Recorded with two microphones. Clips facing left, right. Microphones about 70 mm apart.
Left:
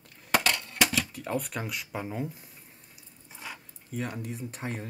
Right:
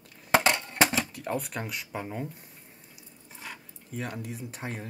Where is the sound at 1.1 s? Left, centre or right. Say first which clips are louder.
Even; centre.